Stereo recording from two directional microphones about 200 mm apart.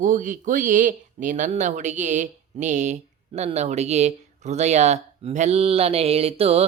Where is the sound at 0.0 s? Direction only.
40° right (ahead or behind).